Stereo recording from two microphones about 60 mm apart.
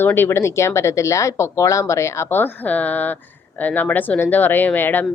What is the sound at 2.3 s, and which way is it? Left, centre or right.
A woman's voice, left.